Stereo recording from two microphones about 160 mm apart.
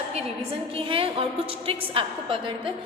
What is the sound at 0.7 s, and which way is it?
A woman's voice, 35° right (ahead or behind).